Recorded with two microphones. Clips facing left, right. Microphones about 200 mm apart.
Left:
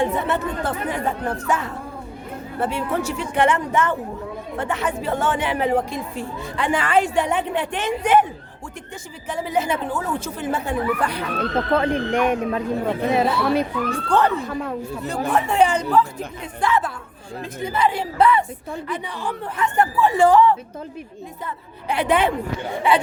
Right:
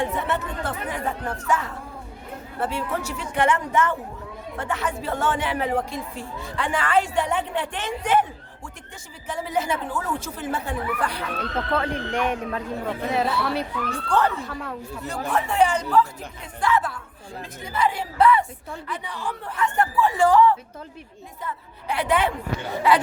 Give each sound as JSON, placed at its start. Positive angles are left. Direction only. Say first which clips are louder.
{"t": 0.3, "sound": "speech", "louder": "left 4 dB", "side_deg": 35}